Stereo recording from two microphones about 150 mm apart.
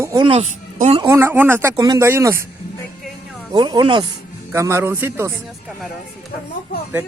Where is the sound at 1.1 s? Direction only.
15° right (ahead or behind).